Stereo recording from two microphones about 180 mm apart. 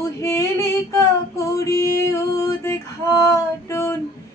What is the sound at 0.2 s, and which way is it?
Female singing, 15° left (ahead or behind).